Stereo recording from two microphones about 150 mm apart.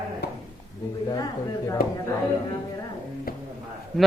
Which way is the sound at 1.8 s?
80° left.